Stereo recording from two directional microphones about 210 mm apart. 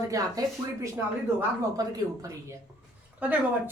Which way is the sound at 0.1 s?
15° right (ahead or behind).